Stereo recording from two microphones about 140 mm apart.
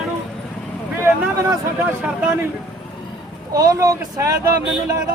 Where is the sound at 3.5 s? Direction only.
25° right (ahead or behind).